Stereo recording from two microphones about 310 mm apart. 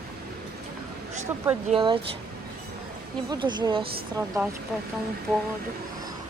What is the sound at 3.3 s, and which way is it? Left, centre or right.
Speech, centre.